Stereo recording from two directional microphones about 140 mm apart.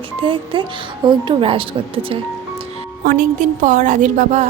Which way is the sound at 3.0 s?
85° right.